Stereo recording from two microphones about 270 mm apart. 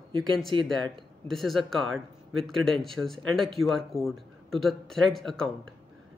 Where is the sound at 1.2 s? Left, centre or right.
Centre.